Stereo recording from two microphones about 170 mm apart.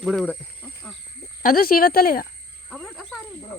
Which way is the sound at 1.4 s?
55° left (ahead or behind).